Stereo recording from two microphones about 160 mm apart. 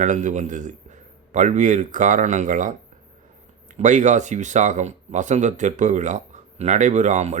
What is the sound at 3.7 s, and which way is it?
Speech, 50° right (ahead or behind).